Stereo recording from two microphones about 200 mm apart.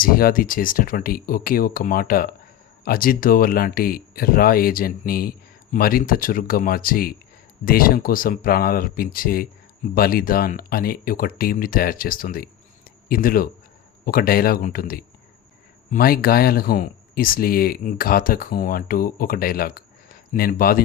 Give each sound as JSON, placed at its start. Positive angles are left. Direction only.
{"t": 0.0, "sound": "speech", "side_deg": 45}